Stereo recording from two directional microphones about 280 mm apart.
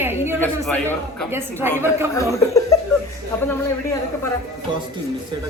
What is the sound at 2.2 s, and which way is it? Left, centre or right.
Speech, centre.